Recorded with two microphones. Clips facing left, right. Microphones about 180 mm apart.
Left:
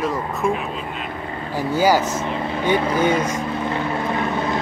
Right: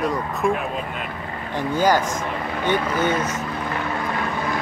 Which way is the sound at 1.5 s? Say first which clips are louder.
Left 2 dB; 10° left (ahead or behind).